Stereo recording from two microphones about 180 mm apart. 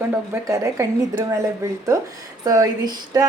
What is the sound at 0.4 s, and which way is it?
Speech, 20° right (ahead or behind).